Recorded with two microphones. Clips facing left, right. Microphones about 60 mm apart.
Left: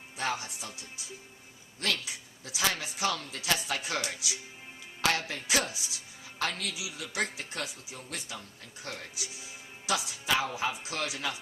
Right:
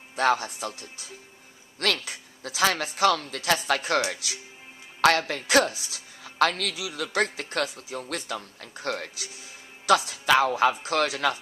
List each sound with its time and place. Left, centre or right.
0.2 s a woman's voice: right